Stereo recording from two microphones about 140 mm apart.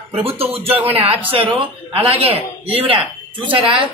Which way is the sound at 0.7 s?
45° right (ahead or behind).